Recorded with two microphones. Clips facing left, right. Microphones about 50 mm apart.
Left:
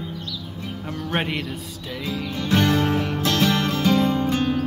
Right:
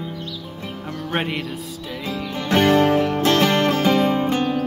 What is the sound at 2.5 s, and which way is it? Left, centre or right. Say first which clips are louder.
Music: right 5 dB; right.